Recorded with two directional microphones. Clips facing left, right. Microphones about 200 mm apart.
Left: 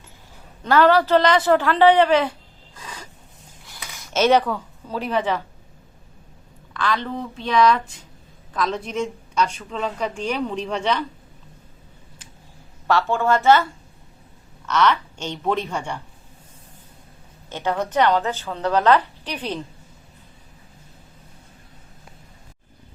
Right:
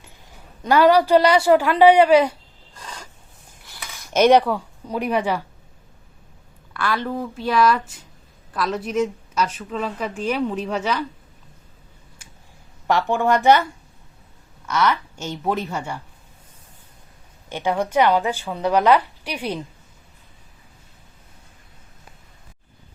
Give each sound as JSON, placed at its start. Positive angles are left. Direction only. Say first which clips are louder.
{"t": 0.6, "sound": "a woman's voice", "louder": "right 1 dB", "side_deg": -10}
{"t": 4.1, "sound": "a woman's voice", "louder": "right 3 dB", "side_deg": -15}
{"t": 6.7, "sound": "a woman's voice", "louder": "right 1 dB", "side_deg": -10}
{"t": 12.9, "sound": "a woman's voice", "louder": "right 1 dB", "side_deg": -15}
{"t": 14.7, "sound": "a woman's voice", "louder": "left 1 dB", "side_deg": -10}
{"t": 17.5, "sound": "a woman's voice", "louder": "right 2 dB", "side_deg": -10}